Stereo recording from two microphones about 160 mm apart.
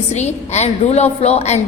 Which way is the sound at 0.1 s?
45° left (ahead or behind).